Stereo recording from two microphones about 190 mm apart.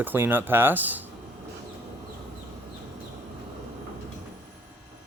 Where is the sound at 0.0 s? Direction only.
10° right (ahead or behind).